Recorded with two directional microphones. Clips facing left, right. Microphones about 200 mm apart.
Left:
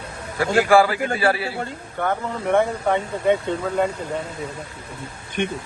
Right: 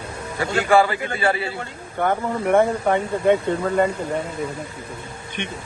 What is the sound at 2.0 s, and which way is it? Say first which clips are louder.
Speech: right 2 dB; 10° right (ahead or behind).